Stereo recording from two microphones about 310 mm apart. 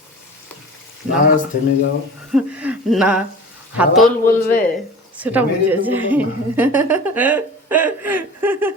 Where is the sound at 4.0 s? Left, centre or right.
Left.